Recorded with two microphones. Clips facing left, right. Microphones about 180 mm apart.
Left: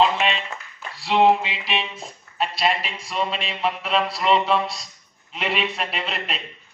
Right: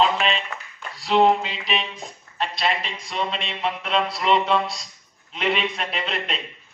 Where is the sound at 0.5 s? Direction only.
25° left (ahead or behind).